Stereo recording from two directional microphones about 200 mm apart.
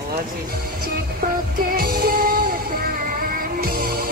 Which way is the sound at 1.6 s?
50° right (ahead or behind).